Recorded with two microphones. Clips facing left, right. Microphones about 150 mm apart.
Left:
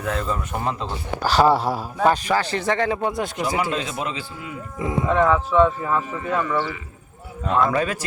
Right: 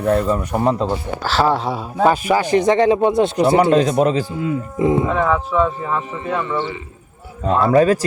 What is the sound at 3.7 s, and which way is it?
Speech, 40° right (ahead or behind).